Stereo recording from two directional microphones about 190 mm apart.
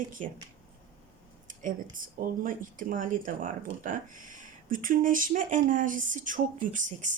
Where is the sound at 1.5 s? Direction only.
45° right (ahead or behind).